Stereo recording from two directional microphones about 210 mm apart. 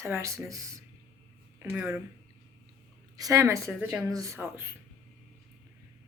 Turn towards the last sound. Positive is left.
turn(degrees=-10)  # may be behind; listen again after turning